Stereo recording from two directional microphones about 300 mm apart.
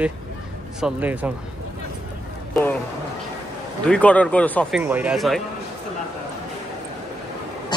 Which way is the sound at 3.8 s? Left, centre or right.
Centre.